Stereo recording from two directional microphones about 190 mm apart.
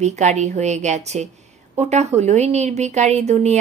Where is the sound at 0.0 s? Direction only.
35° right (ahead or behind).